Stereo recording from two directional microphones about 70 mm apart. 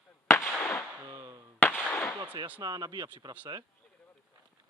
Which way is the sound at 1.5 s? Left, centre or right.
Left.